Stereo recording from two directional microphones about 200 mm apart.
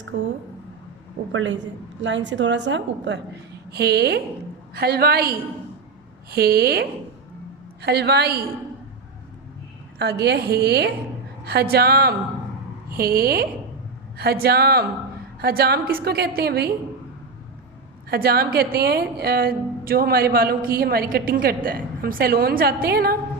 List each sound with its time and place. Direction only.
0.1 s a woman's voice: 65° right (ahead or behind)
1.3 s a woman's voice: 80° right
2.0 s a woman's voice: 65° right (ahead or behind)
6.3 s a woman's voice: 50° right (ahead or behind)
10.0 s a woman's voice: 55° right (ahead or behind)
18.1 s a woman's voice: 50° right (ahead or behind)